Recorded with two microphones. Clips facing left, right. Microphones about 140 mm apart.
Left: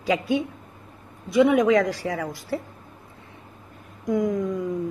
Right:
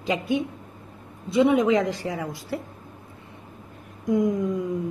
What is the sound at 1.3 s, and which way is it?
Speech, 25° right (ahead or behind).